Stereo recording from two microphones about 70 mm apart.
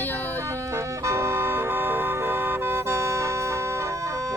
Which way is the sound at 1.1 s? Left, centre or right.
Right.